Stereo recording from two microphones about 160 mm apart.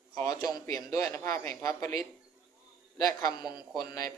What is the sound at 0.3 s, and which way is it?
Speech, 20° left (ahead or behind).